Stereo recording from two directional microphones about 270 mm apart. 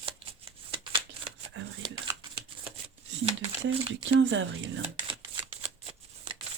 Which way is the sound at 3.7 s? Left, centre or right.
Right.